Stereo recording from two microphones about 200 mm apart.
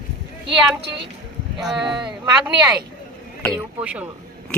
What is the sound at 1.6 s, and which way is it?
Speech, centre (ahead or behind).